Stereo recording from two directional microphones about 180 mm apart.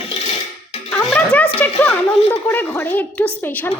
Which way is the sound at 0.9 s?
5° left (ahead or behind).